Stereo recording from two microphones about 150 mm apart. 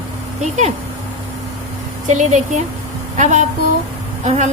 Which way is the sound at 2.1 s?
50° right (ahead or behind).